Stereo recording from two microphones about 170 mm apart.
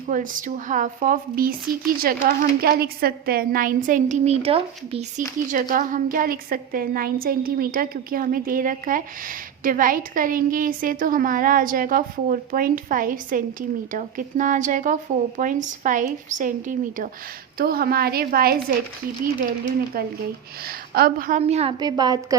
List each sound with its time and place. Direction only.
0.1 s a woman's voice: 50° right (ahead or behind)
17.6 s a woman's voice: 65° right (ahead or behind)
19.9 s a woman's voice: 60° right (ahead or behind)
21.4 s a woman's voice: 35° right (ahead or behind)
21.8 s a woman's voice: 25° right (ahead or behind)